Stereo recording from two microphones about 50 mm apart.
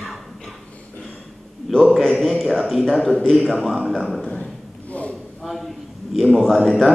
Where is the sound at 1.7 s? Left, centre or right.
Centre.